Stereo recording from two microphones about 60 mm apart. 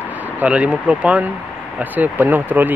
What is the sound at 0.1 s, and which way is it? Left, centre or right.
Speech, right.